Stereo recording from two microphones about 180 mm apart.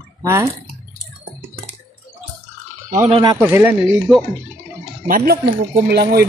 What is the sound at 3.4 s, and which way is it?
Speech, 10° right (ahead or behind).